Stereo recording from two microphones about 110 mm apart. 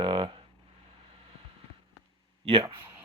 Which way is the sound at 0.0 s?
50° right (ahead or behind).